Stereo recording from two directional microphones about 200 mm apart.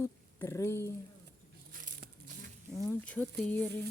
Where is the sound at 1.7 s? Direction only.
45° right (ahead or behind).